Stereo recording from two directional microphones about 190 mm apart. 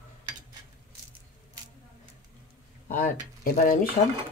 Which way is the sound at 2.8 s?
45° left (ahead or behind).